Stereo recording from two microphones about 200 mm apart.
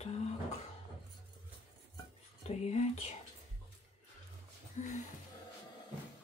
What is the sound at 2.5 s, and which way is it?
Speech, 30° left (ahead or behind).